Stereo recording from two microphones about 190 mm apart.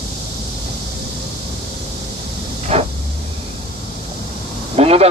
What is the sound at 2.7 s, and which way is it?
Vehicle, 30° right (ahead or behind).